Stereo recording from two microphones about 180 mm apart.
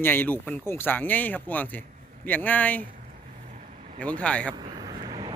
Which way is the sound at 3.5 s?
45° right (ahead or behind).